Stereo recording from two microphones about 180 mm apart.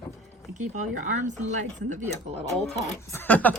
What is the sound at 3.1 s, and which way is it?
Speech, 10° left (ahead or behind).